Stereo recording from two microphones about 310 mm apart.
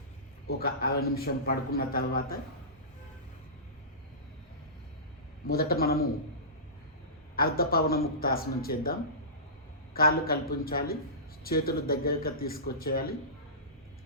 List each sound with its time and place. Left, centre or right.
0.4 s a man's voice: left
5.5 s a man's voice: left
7.3 s a man's voice: left